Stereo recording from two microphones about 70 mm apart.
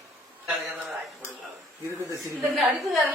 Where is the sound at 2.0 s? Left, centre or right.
Right.